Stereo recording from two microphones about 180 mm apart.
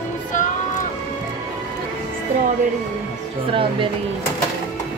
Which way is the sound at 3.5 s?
30° right (ahead or behind).